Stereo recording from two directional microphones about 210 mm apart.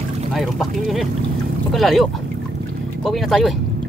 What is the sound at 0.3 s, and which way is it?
Speech, centre (ahead or behind).